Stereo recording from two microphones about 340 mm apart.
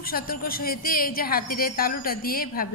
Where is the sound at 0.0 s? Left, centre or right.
Left.